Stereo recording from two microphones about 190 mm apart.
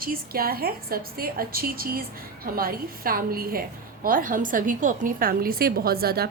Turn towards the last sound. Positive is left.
turn(degrees=-55)  # may be behind; listen again after turning